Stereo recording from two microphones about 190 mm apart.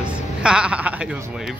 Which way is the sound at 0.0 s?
5° right (ahead or behind).